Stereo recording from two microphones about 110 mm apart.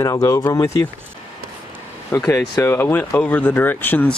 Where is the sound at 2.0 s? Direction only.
25° left (ahead or behind).